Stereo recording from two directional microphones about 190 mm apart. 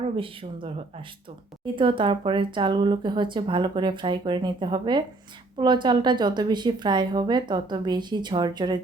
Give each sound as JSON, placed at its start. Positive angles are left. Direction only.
{"t": 0.0, "sound": "speech", "side_deg": -30}